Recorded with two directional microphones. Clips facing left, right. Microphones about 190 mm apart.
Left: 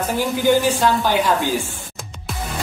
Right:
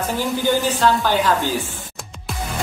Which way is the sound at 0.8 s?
15° left (ahead or behind).